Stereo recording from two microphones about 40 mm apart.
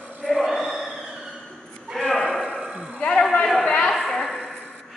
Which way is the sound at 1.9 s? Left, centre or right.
Centre.